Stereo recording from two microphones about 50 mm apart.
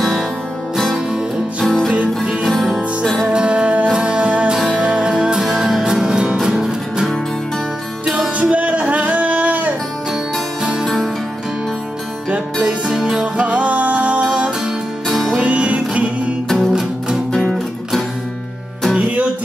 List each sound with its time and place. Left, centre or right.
1.6 s music: centre
3.3 s music: right
8.4 s music: right
10.6 s music: centre
13.1 s music: right
15.0 s music: centre
15.3 s music: right
16.4 s music: centre